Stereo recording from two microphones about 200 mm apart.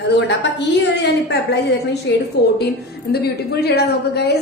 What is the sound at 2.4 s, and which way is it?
A woman's voice, 55° left (ahead or behind).